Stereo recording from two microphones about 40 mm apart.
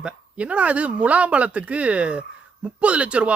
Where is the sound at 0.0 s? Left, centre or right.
Right.